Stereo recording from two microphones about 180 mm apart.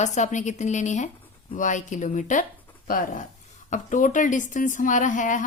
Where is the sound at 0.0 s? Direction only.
40° left (ahead or behind).